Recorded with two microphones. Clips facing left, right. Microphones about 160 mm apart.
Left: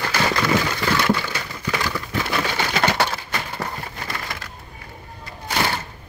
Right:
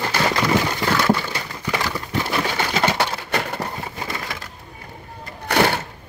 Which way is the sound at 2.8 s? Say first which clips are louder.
Even; 20° right (ahead or behind).